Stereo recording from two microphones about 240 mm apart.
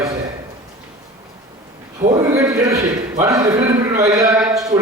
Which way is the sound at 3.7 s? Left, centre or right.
Centre.